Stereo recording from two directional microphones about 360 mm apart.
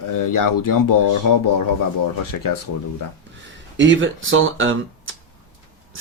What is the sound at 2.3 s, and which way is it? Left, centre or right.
Speech, left.